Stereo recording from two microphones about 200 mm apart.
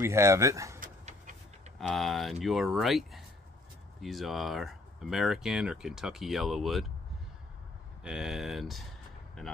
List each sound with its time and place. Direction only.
0.0 s speech: 15° right (ahead or behind)
0.7 s a sound: 40° right (ahead or behind)
1.8 s speech: centre (ahead or behind)
8.0 s speech: 5° right (ahead or behind)